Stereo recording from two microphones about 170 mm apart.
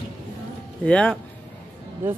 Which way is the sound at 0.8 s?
5° left (ahead or behind).